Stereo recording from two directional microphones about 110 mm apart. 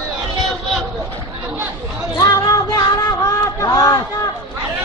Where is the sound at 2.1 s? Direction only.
35° left (ahead or behind).